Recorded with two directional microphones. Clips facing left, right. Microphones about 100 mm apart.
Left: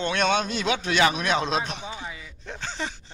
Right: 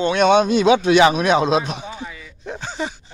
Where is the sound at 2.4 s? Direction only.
15° right (ahead or behind).